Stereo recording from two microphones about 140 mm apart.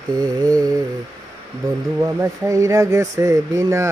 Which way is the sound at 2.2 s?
20° right (ahead or behind).